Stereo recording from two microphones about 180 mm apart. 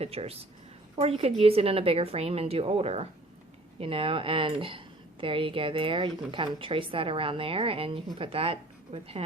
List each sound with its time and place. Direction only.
0.0 s a woman's voice: 35° right (ahead or behind)